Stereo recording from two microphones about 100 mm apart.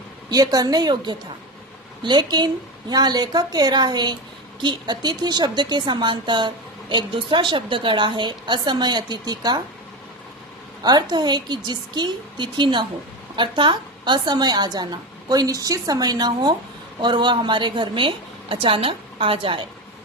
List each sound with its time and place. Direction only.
0.3 s a woman's voice: 40° right (ahead or behind)
11.1 s a woman's voice: 45° right (ahead or behind); by 19.6 s 65° right (ahead or behind)